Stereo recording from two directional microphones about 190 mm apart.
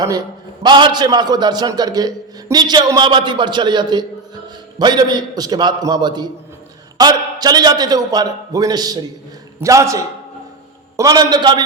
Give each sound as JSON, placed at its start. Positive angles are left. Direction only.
{"t": 0.6, "sound": "a man's voice", "side_deg": -25}